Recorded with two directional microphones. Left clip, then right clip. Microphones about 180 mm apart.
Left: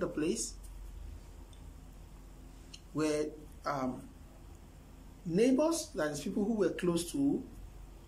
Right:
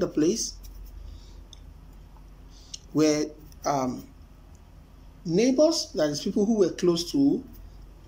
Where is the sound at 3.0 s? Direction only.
20° right (ahead or behind).